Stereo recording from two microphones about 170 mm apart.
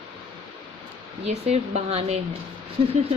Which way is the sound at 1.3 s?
40° right (ahead or behind).